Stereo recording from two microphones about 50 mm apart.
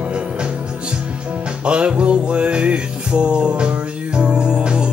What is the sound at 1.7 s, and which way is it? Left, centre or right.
Music, right.